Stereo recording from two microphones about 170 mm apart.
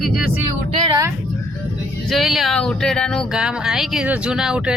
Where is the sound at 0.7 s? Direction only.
25° right (ahead or behind).